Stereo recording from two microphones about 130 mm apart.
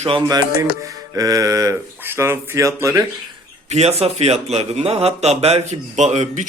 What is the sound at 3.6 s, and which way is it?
Speech, 55° right (ahead or behind).